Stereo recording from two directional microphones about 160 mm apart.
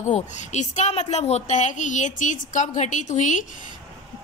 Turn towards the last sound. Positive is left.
turn(degrees=50)  # may be behind; listen again after turning